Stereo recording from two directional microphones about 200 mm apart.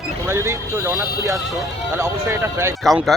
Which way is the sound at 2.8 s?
Centre (ahead or behind).